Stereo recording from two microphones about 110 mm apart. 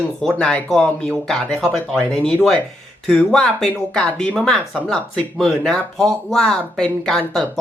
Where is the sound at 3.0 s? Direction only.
5° left (ahead or behind).